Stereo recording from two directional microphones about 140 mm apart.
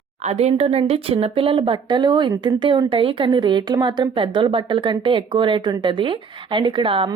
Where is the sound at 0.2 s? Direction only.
50° right (ahead or behind).